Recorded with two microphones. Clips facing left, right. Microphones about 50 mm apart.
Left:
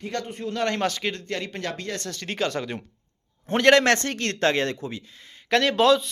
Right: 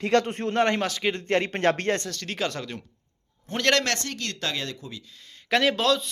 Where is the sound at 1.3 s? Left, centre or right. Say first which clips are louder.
Right 7 dB; right.